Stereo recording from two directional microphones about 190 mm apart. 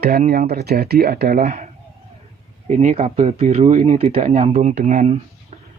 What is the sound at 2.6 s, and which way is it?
Speech, 35° right (ahead or behind).